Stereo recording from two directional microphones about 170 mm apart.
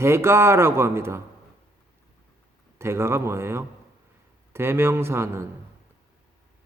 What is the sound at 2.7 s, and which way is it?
Speech, 15° right (ahead or behind).